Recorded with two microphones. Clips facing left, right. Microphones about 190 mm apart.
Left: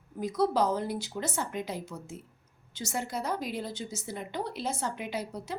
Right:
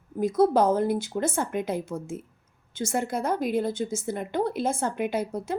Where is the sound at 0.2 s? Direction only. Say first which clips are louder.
Right 6 dB; 50° right (ahead or behind).